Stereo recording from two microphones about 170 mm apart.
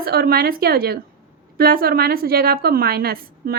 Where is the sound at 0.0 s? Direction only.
65° right (ahead or behind).